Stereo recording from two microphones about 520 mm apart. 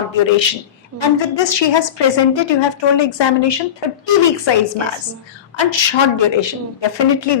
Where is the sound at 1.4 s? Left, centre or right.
Left.